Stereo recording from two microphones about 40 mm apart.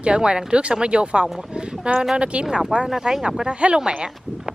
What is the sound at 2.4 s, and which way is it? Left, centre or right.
Speech, centre.